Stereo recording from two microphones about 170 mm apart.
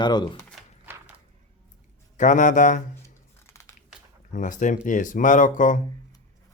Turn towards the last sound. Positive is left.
turn(degrees=50)  # may be behind; listen again after turning